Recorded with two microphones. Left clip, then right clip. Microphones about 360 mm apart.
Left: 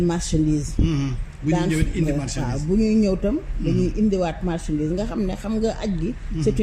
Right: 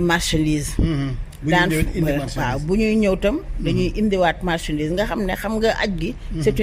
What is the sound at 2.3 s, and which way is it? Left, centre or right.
Speech, right.